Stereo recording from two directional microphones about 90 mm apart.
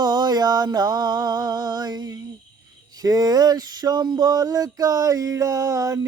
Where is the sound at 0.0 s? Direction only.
50° right (ahead or behind).